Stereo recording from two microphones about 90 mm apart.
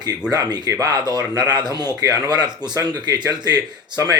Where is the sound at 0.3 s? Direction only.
45° right (ahead or behind).